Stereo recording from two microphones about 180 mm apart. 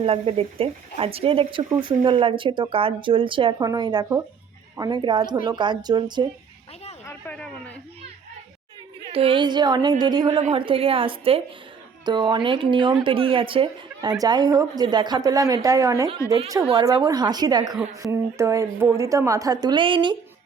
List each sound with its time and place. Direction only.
0.0 s speech: 30° right (ahead or behind)
7.1 s a sound: 10° left (ahead or behind)
9.0 s a woman's voice: 30° right (ahead or behind)